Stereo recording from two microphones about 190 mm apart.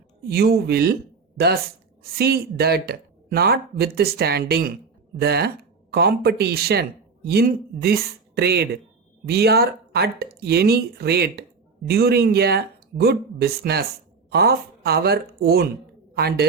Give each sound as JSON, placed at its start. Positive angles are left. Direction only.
{"t": 0.3, "sound": "speech", "side_deg": -55}
{"t": 2.1, "sound": "speech", "side_deg": -55}